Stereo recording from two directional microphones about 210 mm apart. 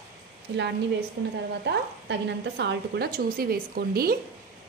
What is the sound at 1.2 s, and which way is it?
A woman's voice, 50° right (ahead or behind).